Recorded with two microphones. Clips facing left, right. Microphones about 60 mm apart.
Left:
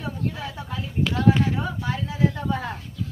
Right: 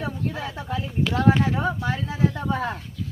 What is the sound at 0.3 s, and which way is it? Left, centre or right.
Speech, centre.